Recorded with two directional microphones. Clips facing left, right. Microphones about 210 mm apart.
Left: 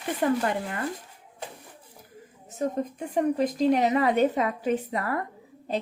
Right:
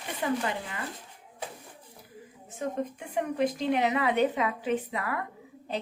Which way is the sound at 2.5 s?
40° left (ahead or behind).